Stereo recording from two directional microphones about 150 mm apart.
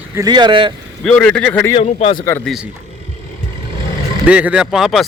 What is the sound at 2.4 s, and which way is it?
Speech, 5° right (ahead or behind).